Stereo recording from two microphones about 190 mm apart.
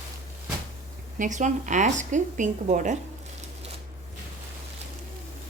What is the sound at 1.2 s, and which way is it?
A woman's voice, 40° right (ahead or behind).